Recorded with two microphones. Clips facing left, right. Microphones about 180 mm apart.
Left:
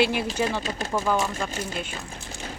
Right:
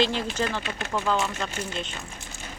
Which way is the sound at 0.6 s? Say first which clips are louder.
Left 3 dB; 35° left (ahead or behind).